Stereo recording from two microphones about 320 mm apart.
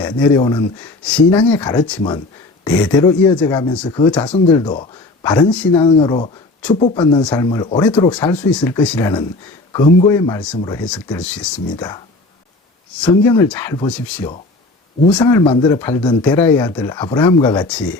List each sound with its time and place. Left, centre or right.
0.0 s speech: centre
13.0 s speech: centre